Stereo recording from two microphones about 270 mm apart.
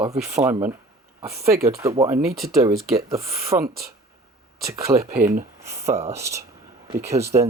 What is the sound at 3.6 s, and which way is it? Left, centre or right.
Speech, right.